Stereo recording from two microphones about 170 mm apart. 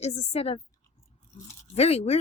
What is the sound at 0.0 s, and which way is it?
Speech, 40° left (ahead or behind).